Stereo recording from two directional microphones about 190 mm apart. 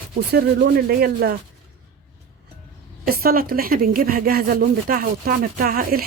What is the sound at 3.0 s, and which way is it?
A woman's voice, 50° right (ahead or behind).